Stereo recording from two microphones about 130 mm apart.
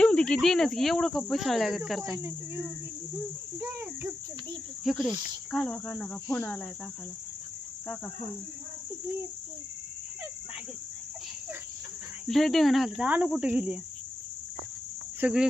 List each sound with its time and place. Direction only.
0.0 s cricket: 10° left (ahead or behind)
3.6 s cricket: 15° right (ahead or behind)
4.8 s cricket: centre (ahead or behind)
12.3 s cricket: centre (ahead or behind)
13.1 s cricket: 10° right (ahead or behind)
15.2 s cricket: 5° right (ahead or behind)